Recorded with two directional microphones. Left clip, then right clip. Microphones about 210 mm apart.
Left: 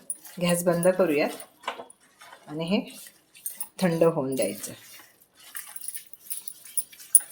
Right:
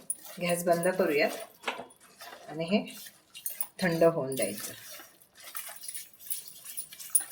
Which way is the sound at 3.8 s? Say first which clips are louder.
Left 2 dB; 35° left (ahead or behind).